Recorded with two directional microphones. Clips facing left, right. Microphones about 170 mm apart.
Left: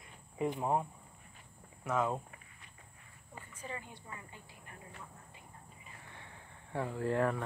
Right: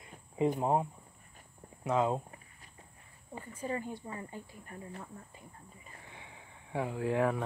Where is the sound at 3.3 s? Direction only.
35° right (ahead or behind).